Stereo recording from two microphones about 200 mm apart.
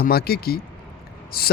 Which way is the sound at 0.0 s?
50° left (ahead or behind).